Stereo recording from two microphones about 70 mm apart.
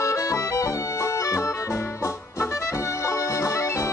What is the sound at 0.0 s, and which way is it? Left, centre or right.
Accordion, left.